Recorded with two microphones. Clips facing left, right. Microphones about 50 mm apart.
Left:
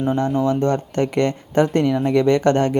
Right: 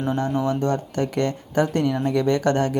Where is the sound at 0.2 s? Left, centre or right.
Left.